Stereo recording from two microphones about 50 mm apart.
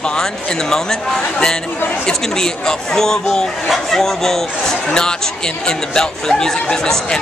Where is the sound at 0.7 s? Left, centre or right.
Centre.